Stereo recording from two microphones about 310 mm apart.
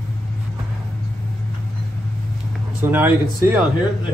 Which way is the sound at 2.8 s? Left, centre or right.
Centre.